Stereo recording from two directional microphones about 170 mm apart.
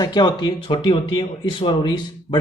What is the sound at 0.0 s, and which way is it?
Speech, 25° left (ahead or behind).